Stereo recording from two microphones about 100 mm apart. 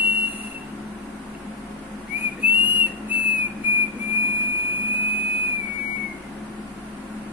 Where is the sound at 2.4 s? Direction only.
15° right (ahead or behind).